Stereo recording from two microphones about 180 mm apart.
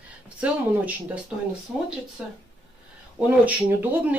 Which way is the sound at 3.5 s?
10° right (ahead or behind).